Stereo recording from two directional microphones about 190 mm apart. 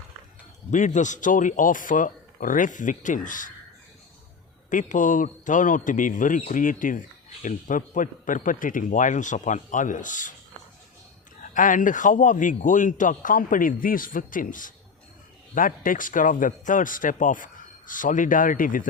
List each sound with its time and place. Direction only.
0.7 s a man's voice: 40° left (ahead or behind)
4.7 s a man's voice: 40° left (ahead or behind)
11.5 s a man's voice: 45° left (ahead or behind)